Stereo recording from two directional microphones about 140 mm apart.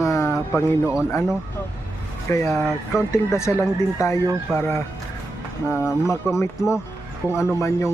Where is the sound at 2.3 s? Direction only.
20° left (ahead or behind).